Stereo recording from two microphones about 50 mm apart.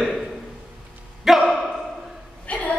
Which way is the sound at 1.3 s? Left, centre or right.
Centre.